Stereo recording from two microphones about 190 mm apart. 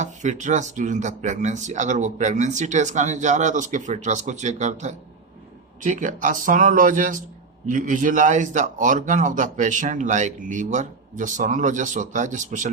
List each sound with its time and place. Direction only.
0.0 s a man's voice: 40° right (ahead or behind)